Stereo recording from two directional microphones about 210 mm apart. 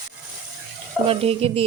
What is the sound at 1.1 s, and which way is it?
Speech, 25° right (ahead or behind).